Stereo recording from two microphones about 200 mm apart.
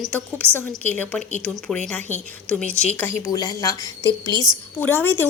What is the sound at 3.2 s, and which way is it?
A woman's voice, 20° left (ahead or behind).